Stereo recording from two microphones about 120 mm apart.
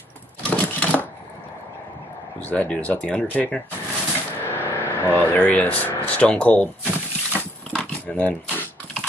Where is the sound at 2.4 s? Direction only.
10° left (ahead or behind).